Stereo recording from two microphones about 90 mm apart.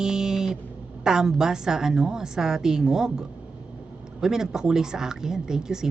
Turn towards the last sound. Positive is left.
turn(degrees=-5)  # may be behind; listen again after turning